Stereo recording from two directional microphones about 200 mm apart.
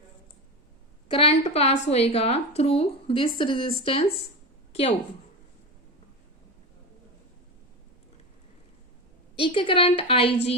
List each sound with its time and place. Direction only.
1.0 s a woman's voice: 30° left (ahead or behind)
9.3 s a woman's voice: 25° left (ahead or behind)